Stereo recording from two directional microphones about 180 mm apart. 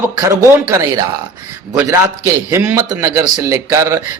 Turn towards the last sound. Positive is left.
turn(degrees=-15)  # may be behind; listen again after turning